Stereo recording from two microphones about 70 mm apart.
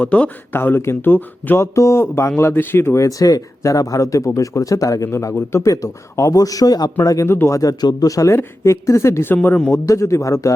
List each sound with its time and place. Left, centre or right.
0.0 s speech: centre
0.5 s a woman's voice: left
3.0 s speech: left
5.0 s speech: left
7.3 s a woman's voice: left
7.5 s a woman's voice: left
9.3 s speech: left
9.8 s speech: left